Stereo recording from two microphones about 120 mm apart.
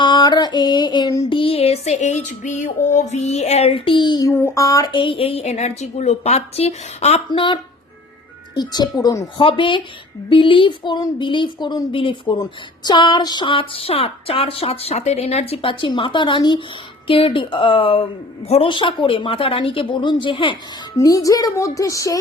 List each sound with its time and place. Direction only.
0.0 s female singing: 40° left (ahead or behind)
1.3 s music: 50° left (ahead or behind)
4.3 s speech: 20° left (ahead or behind)
4.9 s music: 50° left (ahead or behind); by 7.2 s 65° left (ahead or behind)
7.3 s speech: 45° left (ahead or behind)
9.4 s speech: 45° left (ahead or behind)
20.9 s speech: 30° left (ahead or behind)